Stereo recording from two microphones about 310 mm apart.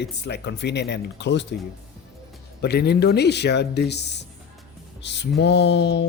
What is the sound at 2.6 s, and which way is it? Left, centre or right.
Speech, left.